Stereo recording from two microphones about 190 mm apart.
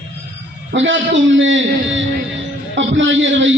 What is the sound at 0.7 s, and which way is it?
A man's voice, 80° right.